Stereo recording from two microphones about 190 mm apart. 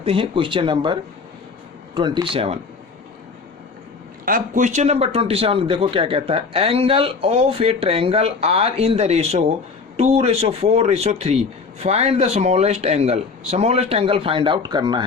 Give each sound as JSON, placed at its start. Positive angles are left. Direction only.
{"t": 0.0, "sound": "speech", "side_deg": -30}
{"t": 2.0, "sound": "speech", "side_deg": -25}
{"t": 4.3, "sound": "speech", "side_deg": -45}